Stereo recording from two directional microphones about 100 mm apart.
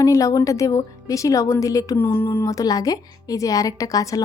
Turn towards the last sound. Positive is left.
turn(degrees=35)  # may be behind; listen again after turning